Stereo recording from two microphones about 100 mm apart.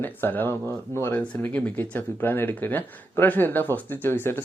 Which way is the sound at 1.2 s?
15° left (ahead or behind).